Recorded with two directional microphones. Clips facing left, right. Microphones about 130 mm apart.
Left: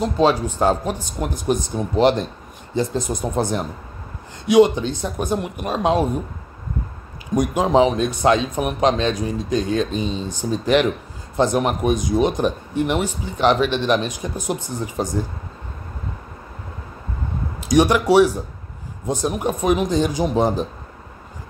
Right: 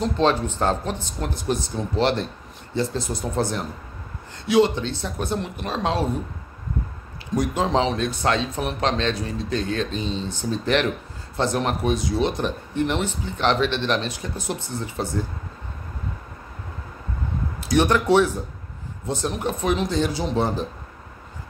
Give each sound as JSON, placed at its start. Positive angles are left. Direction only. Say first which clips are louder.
{"t": 0.0, "sound": "speech", "louder": "left 3 dB", "side_deg": 10}
{"t": 7.3, "sound": "speech", "louder": "left 5 dB", "side_deg": 15}
{"t": 17.6, "sound": "speech", "louder": "left 4 dB", "side_deg": 15}